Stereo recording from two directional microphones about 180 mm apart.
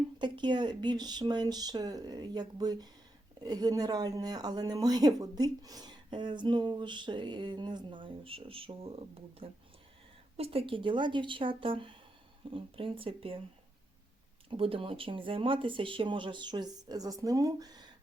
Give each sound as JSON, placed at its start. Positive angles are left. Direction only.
{"t": 0.2, "sound": "speech", "side_deg": -25}
{"t": 14.5, "sound": "speech", "side_deg": -30}